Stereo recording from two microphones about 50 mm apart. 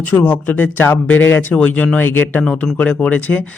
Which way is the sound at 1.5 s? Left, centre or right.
Left.